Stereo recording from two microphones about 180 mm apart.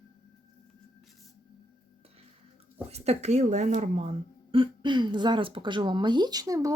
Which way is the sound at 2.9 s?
35° right (ahead or behind).